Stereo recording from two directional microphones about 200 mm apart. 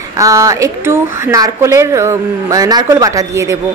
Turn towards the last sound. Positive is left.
turn(degrees=-15)  # may be behind; listen again after turning